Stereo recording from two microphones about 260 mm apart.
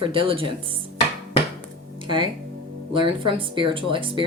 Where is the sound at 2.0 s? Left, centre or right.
Centre.